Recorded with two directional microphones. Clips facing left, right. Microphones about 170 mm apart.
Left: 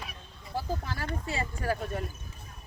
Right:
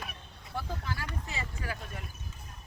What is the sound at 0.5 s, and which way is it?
Speech, 40° left (ahead or behind).